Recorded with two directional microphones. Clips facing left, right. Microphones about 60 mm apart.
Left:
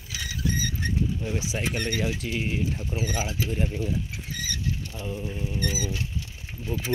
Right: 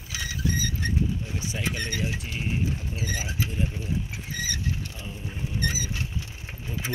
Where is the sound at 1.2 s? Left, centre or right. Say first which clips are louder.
Left 4 dB; left.